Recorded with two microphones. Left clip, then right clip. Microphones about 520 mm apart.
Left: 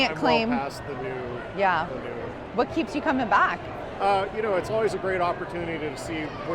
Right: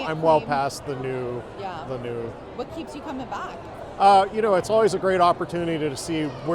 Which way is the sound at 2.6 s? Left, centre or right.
Left.